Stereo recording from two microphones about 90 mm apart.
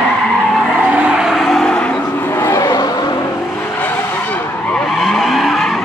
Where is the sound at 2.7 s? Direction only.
50° left (ahead or behind).